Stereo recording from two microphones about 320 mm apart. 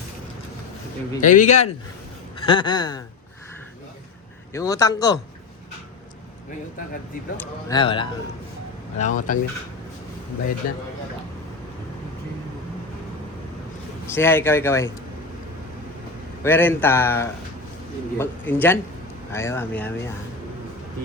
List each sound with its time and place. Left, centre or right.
1.2 s speech: left
4.5 s speech: centre
7.3 s speech: centre
14.1 s speech: centre
16.4 s speech: centre